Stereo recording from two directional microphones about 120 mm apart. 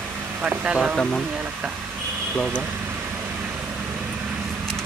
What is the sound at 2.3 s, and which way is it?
Speech, 5° left (ahead or behind).